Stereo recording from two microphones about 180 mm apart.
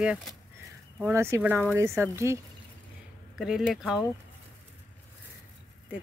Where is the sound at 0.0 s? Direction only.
5° right (ahead or behind).